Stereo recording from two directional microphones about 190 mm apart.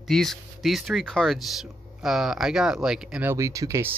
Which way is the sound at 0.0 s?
Centre (ahead or behind).